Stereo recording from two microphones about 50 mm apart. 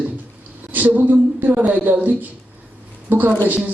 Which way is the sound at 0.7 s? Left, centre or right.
Right.